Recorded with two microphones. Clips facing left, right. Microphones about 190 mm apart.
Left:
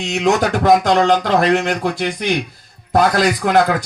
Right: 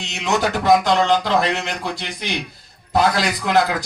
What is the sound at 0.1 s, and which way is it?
A man's voice, 45° left (ahead or behind).